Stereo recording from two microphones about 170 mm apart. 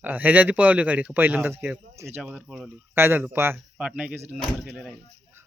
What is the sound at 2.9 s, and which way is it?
Speech, 15° right (ahead or behind).